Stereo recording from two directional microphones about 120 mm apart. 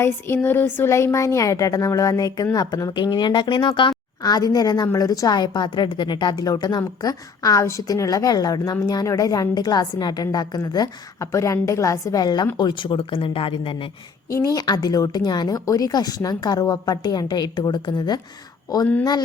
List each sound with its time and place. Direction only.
0.0 s a woman's voice: 20° left (ahead or behind); by 13.7 s 50° left (ahead or behind)
14.3 s a woman's voice: 30° left (ahead or behind)